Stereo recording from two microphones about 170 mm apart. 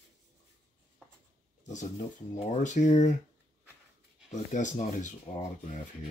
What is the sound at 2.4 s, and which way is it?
Speech, 45° left (ahead or behind).